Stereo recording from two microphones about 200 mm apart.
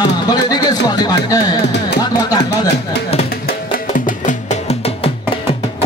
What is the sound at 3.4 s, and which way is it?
Music, 40° left (ahead or behind).